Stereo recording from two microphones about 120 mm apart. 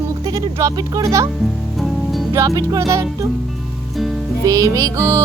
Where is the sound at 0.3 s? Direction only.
30° right (ahead or behind).